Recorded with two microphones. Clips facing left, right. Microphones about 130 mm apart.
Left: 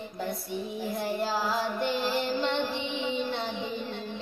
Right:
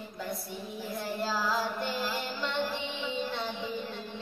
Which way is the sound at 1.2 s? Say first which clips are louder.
Right 1 dB; 20° left (ahead or behind).